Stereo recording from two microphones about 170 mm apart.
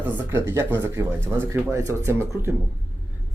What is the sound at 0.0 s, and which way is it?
Speech, 15° right (ahead or behind).